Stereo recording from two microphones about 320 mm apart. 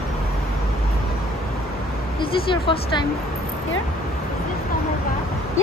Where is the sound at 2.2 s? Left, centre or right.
Centre.